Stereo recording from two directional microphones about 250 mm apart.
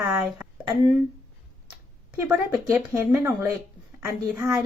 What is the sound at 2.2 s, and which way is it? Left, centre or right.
Speech, centre.